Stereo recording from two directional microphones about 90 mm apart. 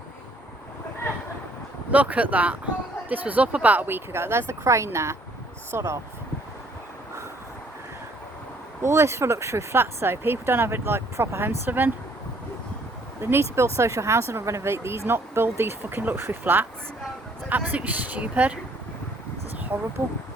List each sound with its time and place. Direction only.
1.9 s speech: 15° right (ahead or behind); by 6.0 s 30° right (ahead or behind)
8.8 s speech: 30° right (ahead or behind)
13.2 s speech: 25° right (ahead or behind)
19.7 s speech: 20° right (ahead or behind)